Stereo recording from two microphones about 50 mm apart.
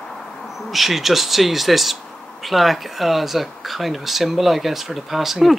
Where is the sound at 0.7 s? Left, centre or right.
Centre.